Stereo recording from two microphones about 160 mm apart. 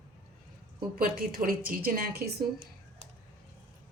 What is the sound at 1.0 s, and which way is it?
A woman's voice, 65° right (ahead or behind).